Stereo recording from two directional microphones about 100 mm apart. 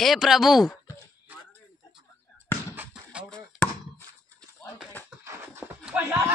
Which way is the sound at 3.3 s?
15° left (ahead or behind).